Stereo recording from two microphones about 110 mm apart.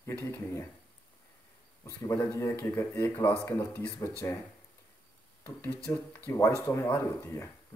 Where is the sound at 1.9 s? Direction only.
25° left (ahead or behind).